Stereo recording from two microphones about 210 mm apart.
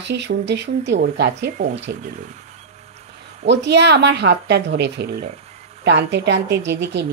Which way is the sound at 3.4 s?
55° right (ahead or behind).